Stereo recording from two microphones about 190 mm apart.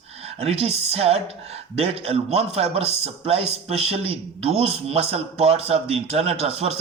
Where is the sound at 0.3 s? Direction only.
30° right (ahead or behind).